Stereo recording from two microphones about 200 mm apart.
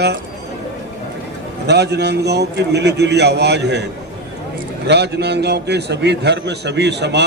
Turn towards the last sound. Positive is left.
turn(degrees=-60)  # may be behind; listen again after turning